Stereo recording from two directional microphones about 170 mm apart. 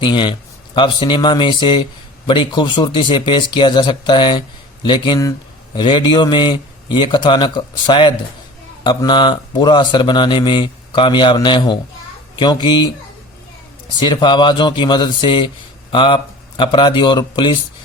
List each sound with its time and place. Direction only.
0.0 s speech: 25° left (ahead or behind)
14.0 s speech: 25° left (ahead or behind)